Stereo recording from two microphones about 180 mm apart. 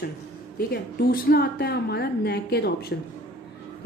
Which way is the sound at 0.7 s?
60° left (ahead or behind).